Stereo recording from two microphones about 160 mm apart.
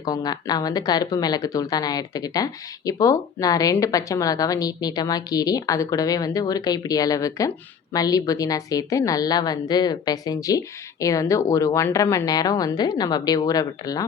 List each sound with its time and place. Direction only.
0.0 s speech: 25° left (ahead or behind)